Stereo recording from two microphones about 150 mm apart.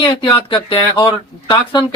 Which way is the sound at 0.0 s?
35° left (ahead or behind).